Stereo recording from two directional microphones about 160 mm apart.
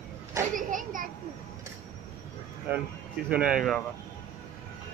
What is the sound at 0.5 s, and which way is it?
Speech, 55° right (ahead or behind).